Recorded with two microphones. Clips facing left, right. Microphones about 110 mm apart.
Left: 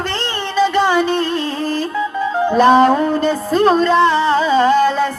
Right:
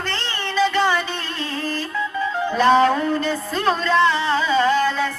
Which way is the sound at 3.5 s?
25° left (ahead or behind).